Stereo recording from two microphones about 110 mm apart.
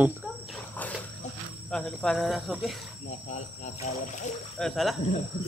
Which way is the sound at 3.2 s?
90° left.